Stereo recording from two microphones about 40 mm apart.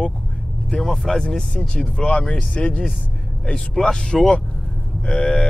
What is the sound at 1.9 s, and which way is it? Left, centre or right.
Speech, centre.